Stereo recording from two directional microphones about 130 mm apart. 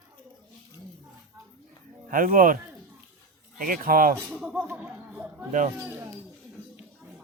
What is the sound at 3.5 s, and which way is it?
Speech, 90° right.